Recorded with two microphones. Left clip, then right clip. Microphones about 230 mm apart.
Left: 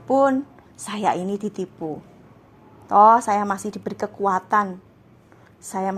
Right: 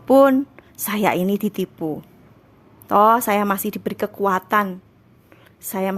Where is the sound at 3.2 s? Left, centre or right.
Right.